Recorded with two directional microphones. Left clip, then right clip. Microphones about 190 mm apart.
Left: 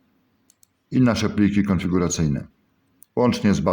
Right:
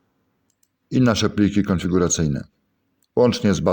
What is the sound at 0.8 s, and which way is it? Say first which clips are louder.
Speech: right 2 dB; 35° right (ahead or behind).